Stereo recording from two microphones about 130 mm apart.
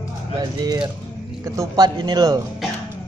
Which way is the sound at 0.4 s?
35° right (ahead or behind).